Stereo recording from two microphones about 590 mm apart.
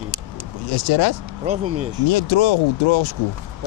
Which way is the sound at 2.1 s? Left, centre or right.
Left.